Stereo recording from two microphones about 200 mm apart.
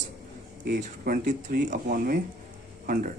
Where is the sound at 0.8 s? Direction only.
45° right (ahead or behind).